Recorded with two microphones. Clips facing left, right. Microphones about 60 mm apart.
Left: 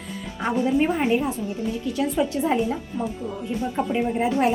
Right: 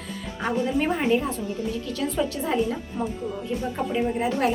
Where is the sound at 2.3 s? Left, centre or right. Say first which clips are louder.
Left 2 dB; left.